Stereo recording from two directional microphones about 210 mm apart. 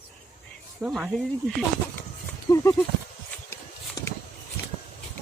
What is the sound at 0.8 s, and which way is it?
Speech, 5° right (ahead or behind).